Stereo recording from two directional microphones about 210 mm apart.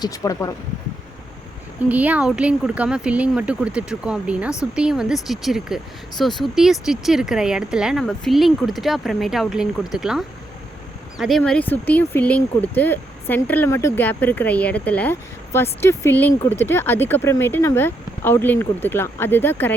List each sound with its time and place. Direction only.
0.0 s speech: 15° left (ahead or behind)
1.9 s speech: 5° right (ahead or behind); by 19.7 s 10° left (ahead or behind)